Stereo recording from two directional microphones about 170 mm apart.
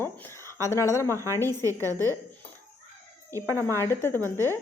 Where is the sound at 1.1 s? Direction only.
15° right (ahead or behind).